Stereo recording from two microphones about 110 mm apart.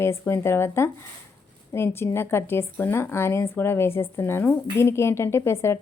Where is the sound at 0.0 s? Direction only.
20° left (ahead or behind).